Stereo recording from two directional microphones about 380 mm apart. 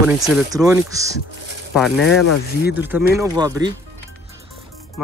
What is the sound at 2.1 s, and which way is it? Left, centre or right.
Speech, left.